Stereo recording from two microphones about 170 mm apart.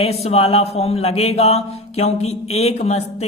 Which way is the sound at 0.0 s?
35° left (ahead or behind).